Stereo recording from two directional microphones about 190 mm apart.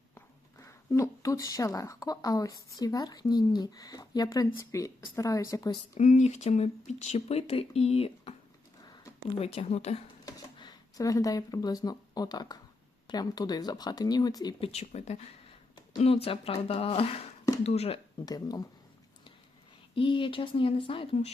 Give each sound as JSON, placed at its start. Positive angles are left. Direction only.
{"t": 0.6, "sound": "a woman's voice", "side_deg": 15}
{"t": 5.9, "sound": "speech", "side_deg": 40}
{"t": 8.9, "sound": "a sound", "side_deg": 15}
{"t": 9.4, "sound": "speech", "side_deg": 35}
{"t": 10.2, "sound": "a woman's voice", "side_deg": 20}
{"t": 14.7, "sound": "speech", "side_deg": 35}
{"t": 18.3, "sound": "a woman's voice", "side_deg": 20}
{"t": 20.0, "sound": "a woman's voice", "side_deg": 25}